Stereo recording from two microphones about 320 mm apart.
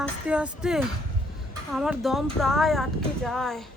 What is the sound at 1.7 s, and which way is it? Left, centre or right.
Speech, centre.